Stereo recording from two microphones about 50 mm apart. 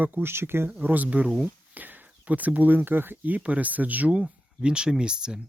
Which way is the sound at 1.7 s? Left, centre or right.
Right.